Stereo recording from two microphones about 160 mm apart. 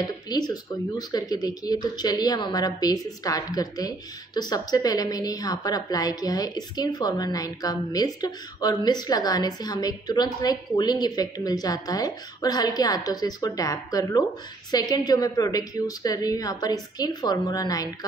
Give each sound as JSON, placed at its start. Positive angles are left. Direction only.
{"t": 0.0, "sound": "speech", "side_deg": 25}